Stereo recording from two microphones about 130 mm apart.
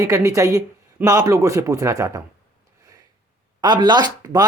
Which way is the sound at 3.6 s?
35° right (ahead or behind).